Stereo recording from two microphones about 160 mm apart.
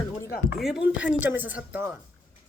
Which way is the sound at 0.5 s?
5° right (ahead or behind).